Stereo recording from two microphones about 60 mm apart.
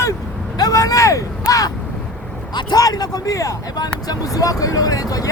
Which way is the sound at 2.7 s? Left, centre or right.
Left.